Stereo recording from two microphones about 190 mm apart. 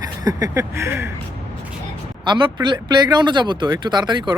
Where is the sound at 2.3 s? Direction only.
25° right (ahead or behind).